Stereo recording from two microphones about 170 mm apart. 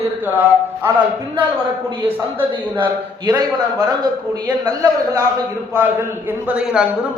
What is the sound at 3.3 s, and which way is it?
A man's voice, 20° right (ahead or behind).